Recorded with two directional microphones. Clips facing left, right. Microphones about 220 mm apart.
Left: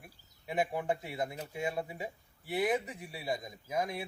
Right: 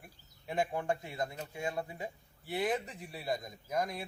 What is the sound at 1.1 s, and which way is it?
A man's voice, 20° left (ahead or behind).